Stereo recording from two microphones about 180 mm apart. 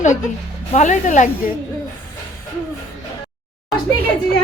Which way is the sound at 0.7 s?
45° left (ahead or behind).